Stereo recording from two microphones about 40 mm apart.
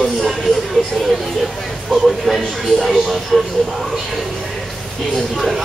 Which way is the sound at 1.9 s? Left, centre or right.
Centre.